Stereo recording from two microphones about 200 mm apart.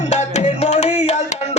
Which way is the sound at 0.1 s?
35° left (ahead or behind).